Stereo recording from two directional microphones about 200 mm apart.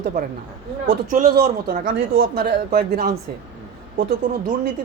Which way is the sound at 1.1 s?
45° right (ahead or behind).